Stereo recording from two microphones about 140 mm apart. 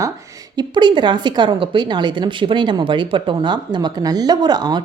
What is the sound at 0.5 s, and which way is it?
A woman's voice, 35° right (ahead or behind).